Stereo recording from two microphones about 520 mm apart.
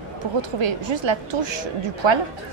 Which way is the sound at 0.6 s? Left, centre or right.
Right.